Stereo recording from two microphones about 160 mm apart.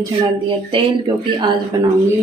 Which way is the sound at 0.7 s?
30° right (ahead or behind).